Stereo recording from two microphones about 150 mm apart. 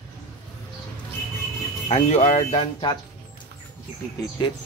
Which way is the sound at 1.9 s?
50° left (ahead or behind).